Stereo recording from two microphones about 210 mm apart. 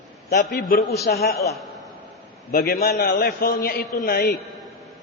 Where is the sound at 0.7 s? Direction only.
45° left (ahead or behind).